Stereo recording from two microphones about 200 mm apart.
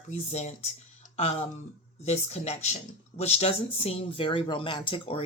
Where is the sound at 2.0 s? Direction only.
35° left (ahead or behind).